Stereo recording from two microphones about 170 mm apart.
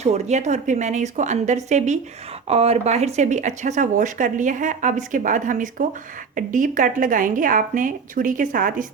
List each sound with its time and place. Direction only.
0.0 s speech: 40° right (ahead or behind)